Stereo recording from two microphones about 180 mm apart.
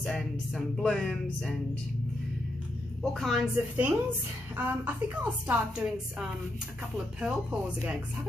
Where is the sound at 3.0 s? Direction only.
Centre (ahead or behind).